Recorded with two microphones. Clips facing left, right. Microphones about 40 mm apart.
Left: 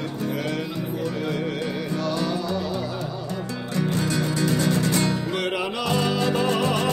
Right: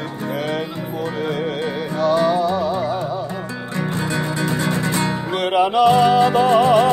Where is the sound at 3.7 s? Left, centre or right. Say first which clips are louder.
Right 1 dB; right.